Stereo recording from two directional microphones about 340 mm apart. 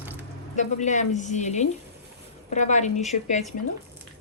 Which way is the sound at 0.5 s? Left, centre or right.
Left.